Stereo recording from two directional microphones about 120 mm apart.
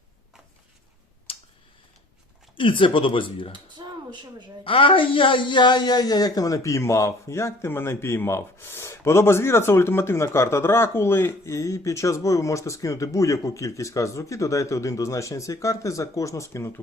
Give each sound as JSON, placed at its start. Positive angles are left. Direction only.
{"t": 1.3, "sound": "tick", "side_deg": 50}
{"t": 2.6, "sound": "speech", "side_deg": 45}
{"t": 3.5, "sound": "a sound", "side_deg": -40}
{"t": 4.6, "sound": "speech", "side_deg": 45}